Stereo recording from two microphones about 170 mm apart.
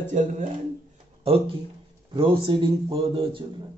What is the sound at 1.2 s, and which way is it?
A man's voice, 35° right (ahead or behind).